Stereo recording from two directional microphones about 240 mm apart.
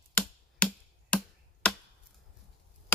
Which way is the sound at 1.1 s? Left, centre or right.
Centre.